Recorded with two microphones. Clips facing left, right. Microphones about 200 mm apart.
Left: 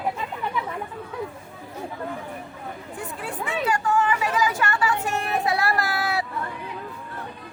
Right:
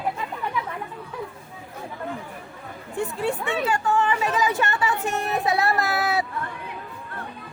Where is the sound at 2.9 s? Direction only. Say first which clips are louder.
Right 9 dB; 25° right (ahead or behind).